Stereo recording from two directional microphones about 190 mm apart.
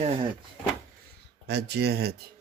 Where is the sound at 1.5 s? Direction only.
60° right (ahead or behind).